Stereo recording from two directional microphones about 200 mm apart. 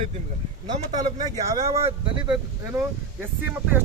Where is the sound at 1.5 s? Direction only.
15° right (ahead or behind).